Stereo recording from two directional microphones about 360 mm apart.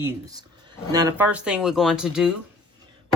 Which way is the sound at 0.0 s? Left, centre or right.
Centre.